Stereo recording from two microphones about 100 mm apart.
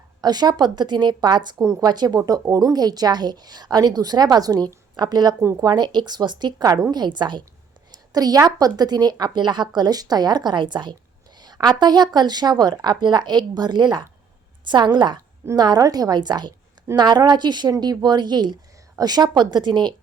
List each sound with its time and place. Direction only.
0.2 s a woman's voice: 45° right (ahead or behind)
1.6 s a woman's voice: 30° right (ahead or behind); by 7.4 s 50° right (ahead or behind)
8.1 s a woman's voice: 40° right (ahead or behind)